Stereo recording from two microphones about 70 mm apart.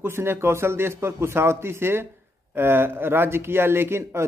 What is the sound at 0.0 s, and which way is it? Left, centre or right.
Speech, right.